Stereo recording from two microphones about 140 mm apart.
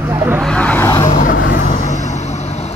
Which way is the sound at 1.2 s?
75° left (ahead or behind).